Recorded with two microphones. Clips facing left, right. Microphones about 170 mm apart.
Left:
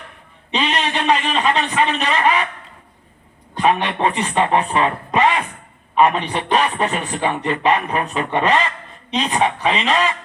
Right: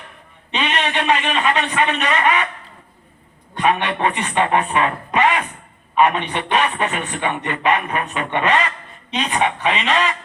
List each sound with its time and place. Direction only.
0.5 s a man's voice: 35° left (ahead or behind)
3.5 s a man's voice: 35° left (ahead or behind)